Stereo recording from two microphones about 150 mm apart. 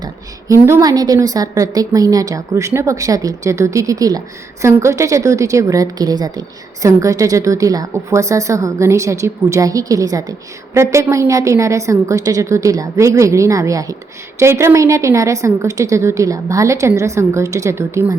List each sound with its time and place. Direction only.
0.0 s a woman's voice: 20° right (ahead or behind)